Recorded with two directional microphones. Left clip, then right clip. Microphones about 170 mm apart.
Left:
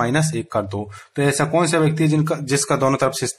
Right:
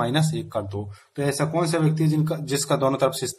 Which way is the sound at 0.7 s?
40° left (ahead or behind).